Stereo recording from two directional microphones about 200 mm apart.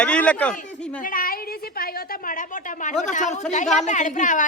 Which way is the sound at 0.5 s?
35° left (ahead or behind).